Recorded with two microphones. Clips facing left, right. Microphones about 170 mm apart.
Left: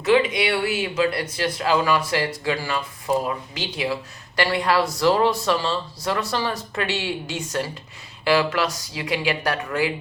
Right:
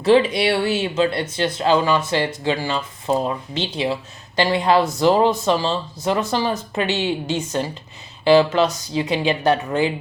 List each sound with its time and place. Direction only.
0.0 s speech: 30° right (ahead or behind)